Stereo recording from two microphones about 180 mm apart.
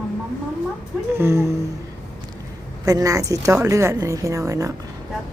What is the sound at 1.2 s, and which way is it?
Speech, 15° right (ahead or behind).